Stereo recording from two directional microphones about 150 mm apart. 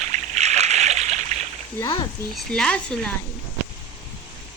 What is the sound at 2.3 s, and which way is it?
Speech, 5° left (ahead or behind).